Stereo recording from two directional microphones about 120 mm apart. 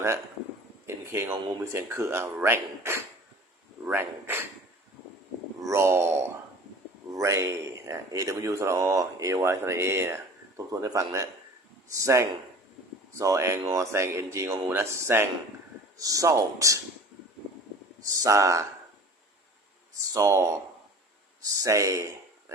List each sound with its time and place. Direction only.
0.9 s speech: 20° right (ahead or behind)
5.5 s a sound: 25° right (ahead or behind)
7.1 s speech: 25° right (ahead or behind)
18.2 s speech: 25° right (ahead or behind)
20.1 s speech: 25° right (ahead or behind)